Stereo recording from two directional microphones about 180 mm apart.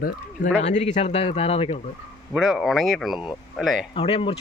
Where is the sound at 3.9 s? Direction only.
30° left (ahead or behind).